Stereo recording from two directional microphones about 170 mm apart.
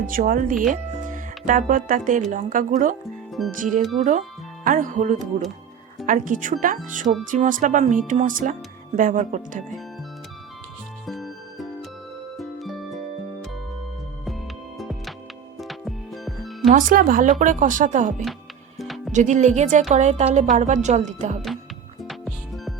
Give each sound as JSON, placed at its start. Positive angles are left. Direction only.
{"t": 0.1, "sound": "speech", "side_deg": -55}
{"t": 11.0, "sound": "music", "side_deg": 0}
{"t": 14.8, "sound": "music", "side_deg": 0}
{"t": 16.6, "sound": "speech", "side_deg": -55}
{"t": 18.8, "sound": "music", "side_deg": 0}
{"t": 19.1, "sound": "speech", "side_deg": -45}
{"t": 22.0, "sound": "music", "side_deg": 0}